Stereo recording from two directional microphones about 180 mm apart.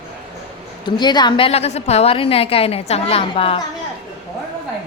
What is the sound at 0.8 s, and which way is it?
A woman's voice, 25° left (ahead or behind).